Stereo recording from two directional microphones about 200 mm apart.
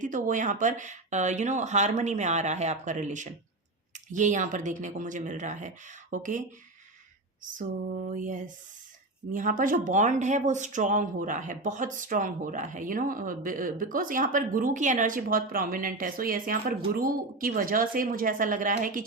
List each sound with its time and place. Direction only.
0.0 s speech: 40° right (ahead or behind)
7.9 s speech: 45° right (ahead or behind)